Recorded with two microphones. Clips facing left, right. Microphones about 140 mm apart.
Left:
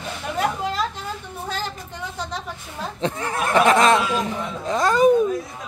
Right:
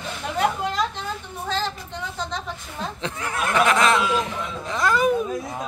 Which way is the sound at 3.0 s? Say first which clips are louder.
Left 5 dB; 25° left (ahead or behind).